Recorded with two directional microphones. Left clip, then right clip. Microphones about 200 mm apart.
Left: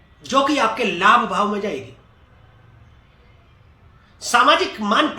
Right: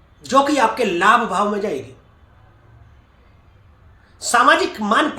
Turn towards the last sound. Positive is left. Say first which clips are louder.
# right 1 dB
turn(degrees=-20)  # may be behind; listen again after turning